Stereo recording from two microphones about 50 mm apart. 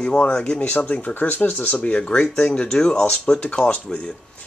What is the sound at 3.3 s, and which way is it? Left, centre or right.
Speech, left.